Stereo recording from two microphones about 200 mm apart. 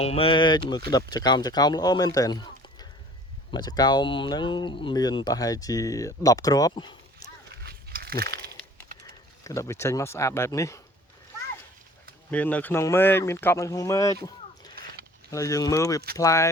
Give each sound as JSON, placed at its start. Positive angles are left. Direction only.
{"t": 0.0, "sound": "speech", "side_deg": 30}
{"t": 7.6, "sound": "a sound", "side_deg": -50}
{"t": 9.4, "sound": "speech", "side_deg": 15}
{"t": 12.3, "sound": "speech", "side_deg": 5}
{"t": 14.3, "sound": "a sound", "side_deg": 20}
{"t": 15.3, "sound": "speech", "side_deg": 15}